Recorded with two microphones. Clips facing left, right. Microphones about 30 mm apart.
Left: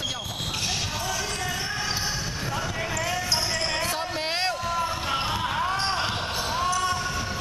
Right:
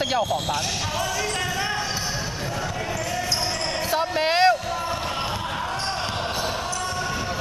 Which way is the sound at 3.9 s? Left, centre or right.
Centre.